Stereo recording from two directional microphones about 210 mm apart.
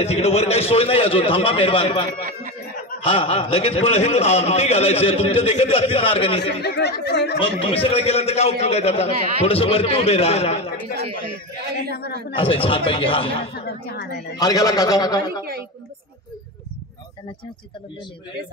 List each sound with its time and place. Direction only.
0.0 s a man's voice: 30° left (ahead or behind)
6.4 s speech: 50° left (ahead or behind)
7.6 s a man's voice: 25° left (ahead or behind)
12.4 s a man's voice: 25° left (ahead or behind)
13.6 s speech: 50° left (ahead or behind)
14.4 s a man's voice: 15° left (ahead or behind)